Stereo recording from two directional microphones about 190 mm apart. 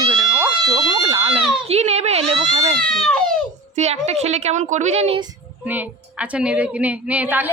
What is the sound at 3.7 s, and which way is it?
Speech, 35° right (ahead or behind).